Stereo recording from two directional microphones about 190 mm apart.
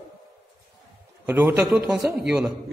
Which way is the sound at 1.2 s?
10° right (ahead or behind).